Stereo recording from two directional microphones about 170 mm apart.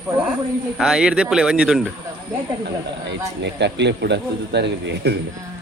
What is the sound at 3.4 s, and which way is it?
A man's voice, 90° right.